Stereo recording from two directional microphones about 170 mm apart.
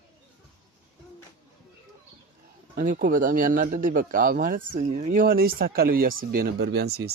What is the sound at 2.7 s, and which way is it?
Speech, 50° right (ahead or behind).